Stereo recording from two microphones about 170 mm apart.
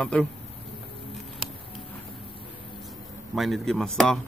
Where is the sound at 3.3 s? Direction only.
Centre (ahead or behind).